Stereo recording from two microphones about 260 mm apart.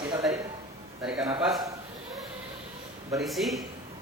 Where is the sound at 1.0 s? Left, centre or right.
Centre.